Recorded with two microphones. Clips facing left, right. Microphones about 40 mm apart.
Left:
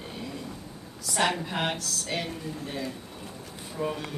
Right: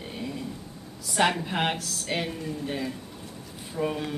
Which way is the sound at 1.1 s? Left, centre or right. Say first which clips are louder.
Right 2 dB; centre.